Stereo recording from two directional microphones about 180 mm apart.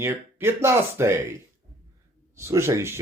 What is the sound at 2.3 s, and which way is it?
Speech, 15° right (ahead or behind).